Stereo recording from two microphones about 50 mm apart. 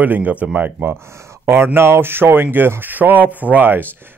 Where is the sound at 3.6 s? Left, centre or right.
Right.